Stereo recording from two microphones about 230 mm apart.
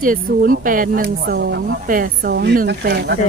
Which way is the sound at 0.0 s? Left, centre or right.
Right.